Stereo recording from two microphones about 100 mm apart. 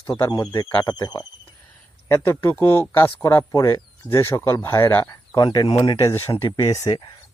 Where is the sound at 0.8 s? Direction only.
40° left (ahead or behind).